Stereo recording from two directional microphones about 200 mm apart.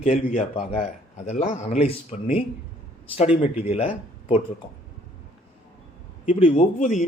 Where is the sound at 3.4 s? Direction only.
30° left (ahead or behind).